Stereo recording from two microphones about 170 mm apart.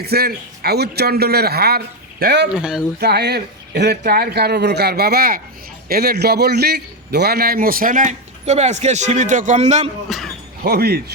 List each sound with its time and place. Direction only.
0.0 s a man's voice: 70° right (ahead or behind)
2.5 s speech: 5° right (ahead or behind)
3.0 s a man's voice: 70° right (ahead or behind); by 9.9 s 40° right (ahead or behind)
10.1 s speech: centre (ahead or behind)
10.6 s a man's voice: 65° right (ahead or behind)